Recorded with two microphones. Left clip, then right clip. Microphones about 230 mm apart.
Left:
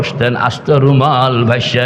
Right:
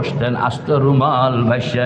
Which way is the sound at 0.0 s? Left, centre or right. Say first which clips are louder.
Left 5 dB; left.